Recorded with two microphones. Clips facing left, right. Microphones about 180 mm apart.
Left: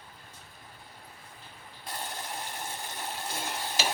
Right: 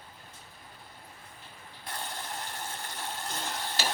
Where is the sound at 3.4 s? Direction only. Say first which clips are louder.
Left 1 dB; 10° left (ahead or behind).